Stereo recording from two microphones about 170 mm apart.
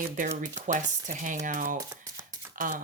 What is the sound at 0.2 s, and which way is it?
Speech, 50° right (ahead or behind).